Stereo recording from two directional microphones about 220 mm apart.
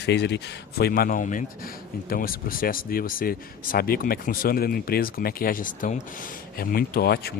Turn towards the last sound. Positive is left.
turn(degrees=45)  # may be behind; listen again after turning